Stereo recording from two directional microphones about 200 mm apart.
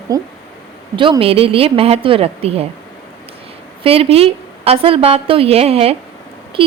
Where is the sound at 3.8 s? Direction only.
30° right (ahead or behind).